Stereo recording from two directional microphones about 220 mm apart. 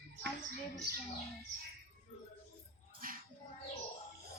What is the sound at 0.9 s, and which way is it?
Bird, 45° right (ahead or behind).